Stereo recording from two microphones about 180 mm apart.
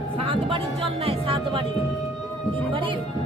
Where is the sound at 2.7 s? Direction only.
30° right (ahead or behind).